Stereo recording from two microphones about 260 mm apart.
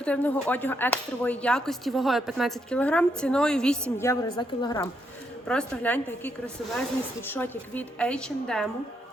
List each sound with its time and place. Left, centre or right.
0.0 s speech: centre
5.5 s speech: centre